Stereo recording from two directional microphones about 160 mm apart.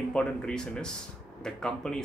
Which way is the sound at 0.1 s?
5° left (ahead or behind).